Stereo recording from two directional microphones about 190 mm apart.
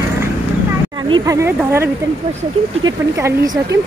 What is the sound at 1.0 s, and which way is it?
A woman's voice, 20° right (ahead or behind).